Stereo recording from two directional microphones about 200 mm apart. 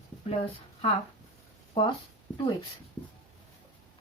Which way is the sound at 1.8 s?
25° left (ahead or behind).